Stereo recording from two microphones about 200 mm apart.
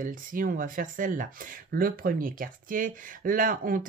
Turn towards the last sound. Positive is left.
turn(degrees=-45)  # may be behind; listen again after turning